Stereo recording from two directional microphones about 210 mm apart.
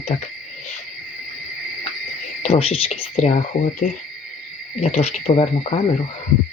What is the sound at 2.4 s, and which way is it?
A woman's voice, 30° left (ahead or behind).